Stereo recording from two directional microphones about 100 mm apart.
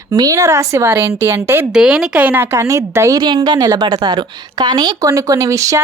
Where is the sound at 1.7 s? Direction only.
10° right (ahead or behind); by 3.2 s 30° right (ahead or behind).